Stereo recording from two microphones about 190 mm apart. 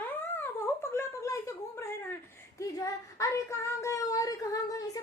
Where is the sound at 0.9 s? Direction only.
15° left (ahead or behind).